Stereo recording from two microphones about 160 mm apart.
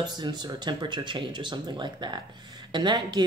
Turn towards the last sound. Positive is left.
turn(degrees=-30)  # may be behind; listen again after turning